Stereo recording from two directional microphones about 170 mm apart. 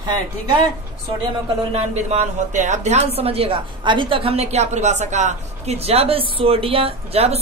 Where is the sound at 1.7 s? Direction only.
45° right (ahead or behind).